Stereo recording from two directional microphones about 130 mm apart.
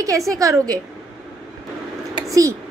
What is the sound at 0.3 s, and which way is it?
Speech, 25° right (ahead or behind).